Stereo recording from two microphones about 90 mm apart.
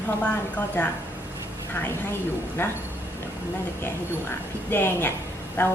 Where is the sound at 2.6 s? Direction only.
25° left (ahead or behind).